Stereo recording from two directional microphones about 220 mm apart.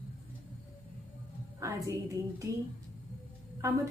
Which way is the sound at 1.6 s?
15° right (ahead or behind).